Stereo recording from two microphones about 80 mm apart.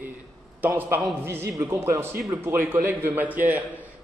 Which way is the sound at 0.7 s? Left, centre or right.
Right.